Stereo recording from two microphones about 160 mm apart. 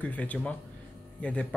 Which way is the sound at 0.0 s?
10° left (ahead or behind).